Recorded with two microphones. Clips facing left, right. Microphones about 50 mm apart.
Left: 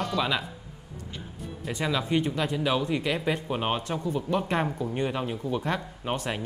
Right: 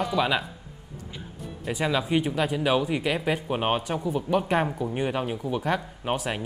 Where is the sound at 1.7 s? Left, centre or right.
Centre.